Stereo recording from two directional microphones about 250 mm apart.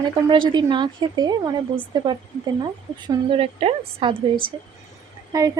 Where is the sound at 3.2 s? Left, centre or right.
Right.